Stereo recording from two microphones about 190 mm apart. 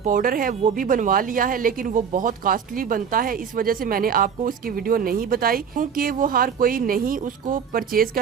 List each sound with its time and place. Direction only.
0.0 s speech: 45° right (ahead or behind)